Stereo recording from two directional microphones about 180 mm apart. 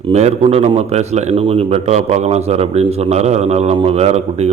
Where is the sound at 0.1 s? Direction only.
35° right (ahead or behind).